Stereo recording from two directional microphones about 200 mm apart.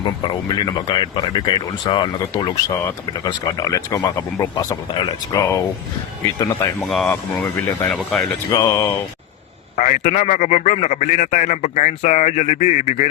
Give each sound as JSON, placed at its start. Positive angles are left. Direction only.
{"t": 0.0, "sound": "speech", "side_deg": 20}
{"t": 6.8, "sound": "speech", "side_deg": 5}
{"t": 8.4, "sound": "speech", "side_deg": 20}
{"t": 9.7, "sound": "a man's voice", "side_deg": 35}